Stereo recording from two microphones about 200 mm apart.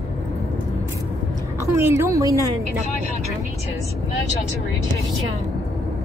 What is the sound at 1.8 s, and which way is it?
Speech, 15° right (ahead or behind).